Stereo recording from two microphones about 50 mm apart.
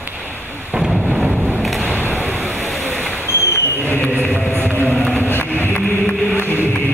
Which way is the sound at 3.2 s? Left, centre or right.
Left.